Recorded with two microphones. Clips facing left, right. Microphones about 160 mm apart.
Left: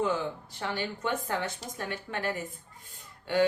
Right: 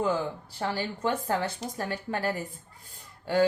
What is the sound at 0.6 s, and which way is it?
A woman's voice, 35° right (ahead or behind).